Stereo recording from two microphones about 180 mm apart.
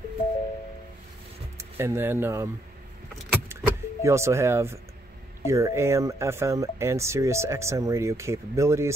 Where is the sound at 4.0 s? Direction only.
15° right (ahead or behind).